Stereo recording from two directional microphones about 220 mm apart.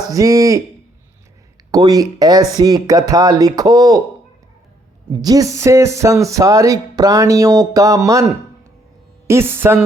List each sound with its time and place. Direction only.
0.1 s speech: 15° right (ahead or behind)
1.7 s speech: 15° right (ahead or behind)
5.1 s speech: 15° right (ahead or behind)